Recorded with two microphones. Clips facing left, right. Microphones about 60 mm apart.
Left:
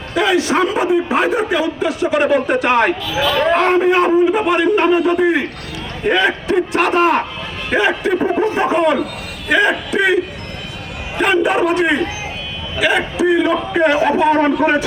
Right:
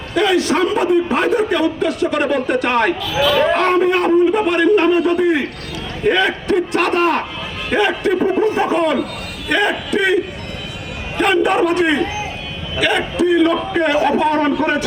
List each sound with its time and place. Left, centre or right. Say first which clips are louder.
0.1 s a man's voice: even; centre
8.2 s a sound: right 1 dB; left
8.7 s a man's voice: left 2 dB; centre
11.2 s a man's voice: even; centre